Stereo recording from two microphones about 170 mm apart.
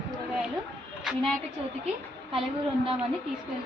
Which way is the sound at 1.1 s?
5° right (ahead or behind).